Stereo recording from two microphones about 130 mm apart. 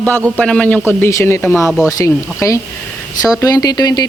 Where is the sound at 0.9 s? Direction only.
20° left (ahead or behind).